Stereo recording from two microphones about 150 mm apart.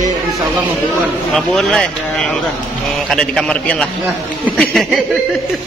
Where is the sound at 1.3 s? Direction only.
5° left (ahead or behind).